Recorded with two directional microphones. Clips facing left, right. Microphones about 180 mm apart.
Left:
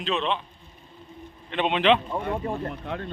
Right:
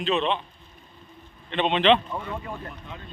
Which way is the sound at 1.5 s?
5° left (ahead or behind).